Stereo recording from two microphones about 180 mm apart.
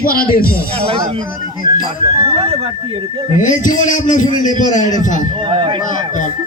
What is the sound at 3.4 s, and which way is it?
A man's voice, 45° left (ahead or behind).